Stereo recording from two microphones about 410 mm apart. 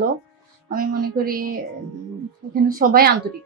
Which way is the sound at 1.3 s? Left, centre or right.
Right.